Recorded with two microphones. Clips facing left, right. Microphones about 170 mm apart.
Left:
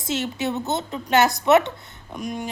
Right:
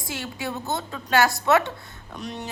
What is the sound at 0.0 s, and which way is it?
A woman's voice, 20° left (ahead or behind).